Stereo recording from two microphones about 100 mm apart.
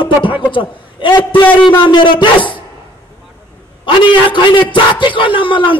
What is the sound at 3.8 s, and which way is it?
A man's voice, 55° left (ahead or behind).